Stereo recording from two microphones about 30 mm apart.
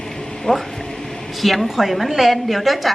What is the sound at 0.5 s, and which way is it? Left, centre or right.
Speech, left.